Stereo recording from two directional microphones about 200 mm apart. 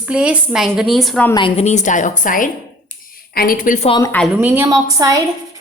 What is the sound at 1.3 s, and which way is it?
A woman's voice, 25° left (ahead or behind).